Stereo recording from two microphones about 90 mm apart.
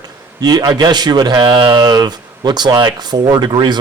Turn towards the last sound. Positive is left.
turn(degrees=-55)  # may be behind; listen again after turning